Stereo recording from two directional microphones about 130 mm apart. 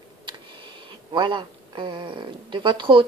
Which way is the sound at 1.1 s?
35° right (ahead or behind).